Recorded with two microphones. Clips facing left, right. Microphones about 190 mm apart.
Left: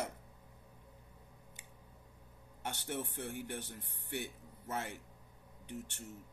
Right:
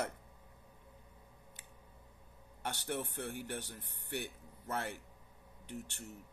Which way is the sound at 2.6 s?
25° left (ahead or behind).